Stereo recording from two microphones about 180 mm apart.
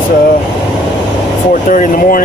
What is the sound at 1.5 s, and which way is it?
Speech, 45° left (ahead or behind).